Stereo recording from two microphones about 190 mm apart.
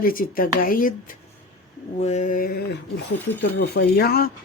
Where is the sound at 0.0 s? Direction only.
50° left (ahead or behind).